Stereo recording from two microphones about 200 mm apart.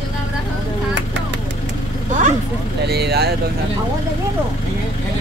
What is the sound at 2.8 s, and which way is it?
Speech, 55° right (ahead or behind).